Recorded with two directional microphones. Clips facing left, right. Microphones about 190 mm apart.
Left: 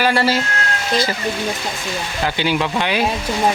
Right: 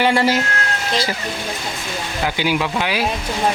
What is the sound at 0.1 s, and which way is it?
Speech, 15° right (ahead or behind).